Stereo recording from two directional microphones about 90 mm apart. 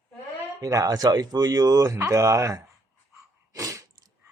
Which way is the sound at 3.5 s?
40° right (ahead or behind).